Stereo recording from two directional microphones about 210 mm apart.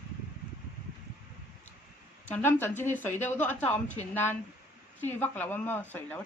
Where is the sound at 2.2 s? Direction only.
10° left (ahead or behind).